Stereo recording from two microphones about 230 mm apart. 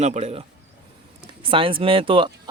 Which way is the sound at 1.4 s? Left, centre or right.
Right.